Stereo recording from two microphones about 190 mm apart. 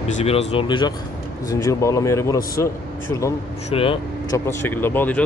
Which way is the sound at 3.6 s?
30° left (ahead or behind).